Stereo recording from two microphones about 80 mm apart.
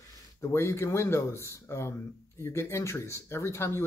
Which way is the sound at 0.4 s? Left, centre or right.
Left.